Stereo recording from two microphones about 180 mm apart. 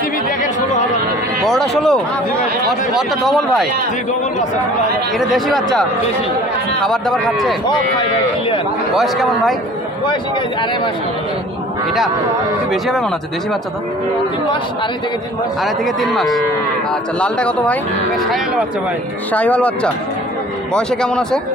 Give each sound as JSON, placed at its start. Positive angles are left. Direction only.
{"t": 1.4, "sound": "speech", "side_deg": 0}
{"t": 5.3, "sound": "speech", "side_deg": 0}
{"t": 6.9, "sound": "speech", "side_deg": 0}
{"t": 7.6, "sound": "speech", "side_deg": 25}
{"t": 8.9, "sound": "speech", "side_deg": 0}
{"t": 15.6, "sound": "speech", "side_deg": 0}
{"t": 19.3, "sound": "speech", "side_deg": 10}